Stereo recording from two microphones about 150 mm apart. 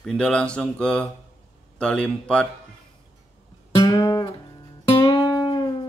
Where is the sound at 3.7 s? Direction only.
25° left (ahead or behind).